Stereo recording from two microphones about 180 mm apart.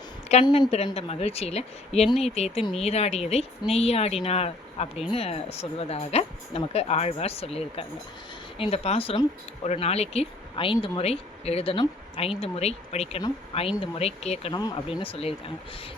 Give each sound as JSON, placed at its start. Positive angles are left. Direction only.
{"t": 0.4, "sound": "a woman's voice", "side_deg": 25}
{"t": 14.5, "sound": "speech", "side_deg": 25}